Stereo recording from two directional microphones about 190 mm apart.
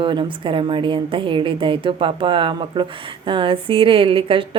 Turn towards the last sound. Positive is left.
turn(degrees=-25)  # may be behind; listen again after turning